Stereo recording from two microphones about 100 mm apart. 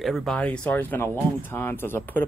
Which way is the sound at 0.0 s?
Centre (ahead or behind).